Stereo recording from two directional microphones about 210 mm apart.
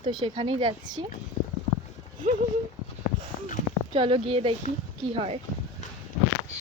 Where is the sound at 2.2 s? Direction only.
40° right (ahead or behind).